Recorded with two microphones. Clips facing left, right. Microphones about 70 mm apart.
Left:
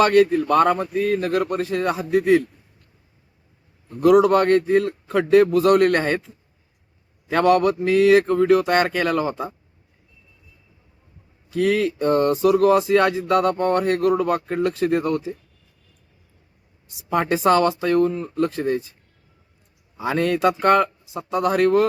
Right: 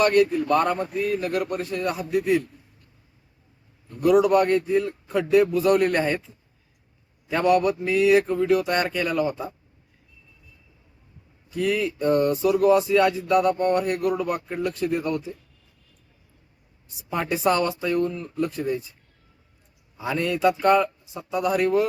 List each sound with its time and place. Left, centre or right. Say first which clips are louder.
0.1 s speech: left 3 dB; left
4.0 s speech: left 3 dB; left
7.3 s a man's voice: left 3 dB; left
11.5 s speech: left 4 dB; left
17.1 s speech: left 5 dB; left
20.0 s a man's voice: left 3 dB; left